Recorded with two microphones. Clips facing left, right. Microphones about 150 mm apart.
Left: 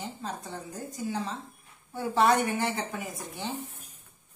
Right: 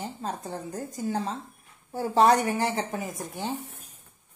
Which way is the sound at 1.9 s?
40° right (ahead or behind).